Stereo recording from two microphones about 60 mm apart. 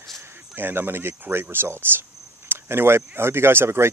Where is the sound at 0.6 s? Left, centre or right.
Right.